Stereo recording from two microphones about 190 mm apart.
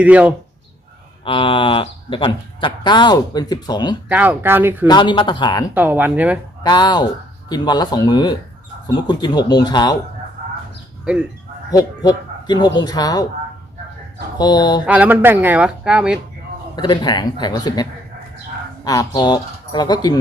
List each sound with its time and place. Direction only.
0.0 s speech: 5° right (ahead or behind)
1.2 s speech: 25° left (ahead or behind)
4.1 s speech: 10° right (ahead or behind)
4.9 s speech: 25° left (ahead or behind)
5.7 s speech: 10° right (ahead or behind)
6.6 s speech: 20° left (ahead or behind)
11.0 s speech: 5° right (ahead or behind)
11.7 s speech: 20° left (ahead or behind)
14.3 s speech: 20° left (ahead or behind)
14.8 s speech: 10° right (ahead or behind)
16.7 s speech: 25° left (ahead or behind)
18.9 s speech: 20° left (ahead or behind)